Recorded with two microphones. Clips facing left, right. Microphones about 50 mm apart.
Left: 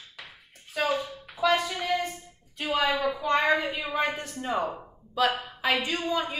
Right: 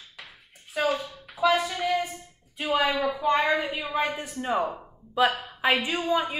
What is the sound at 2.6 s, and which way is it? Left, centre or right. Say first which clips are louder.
Speech: right 2 dB; centre.